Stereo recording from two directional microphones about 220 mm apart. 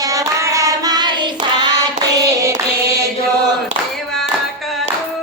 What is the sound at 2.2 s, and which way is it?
Hands, 15° right (ahead or behind).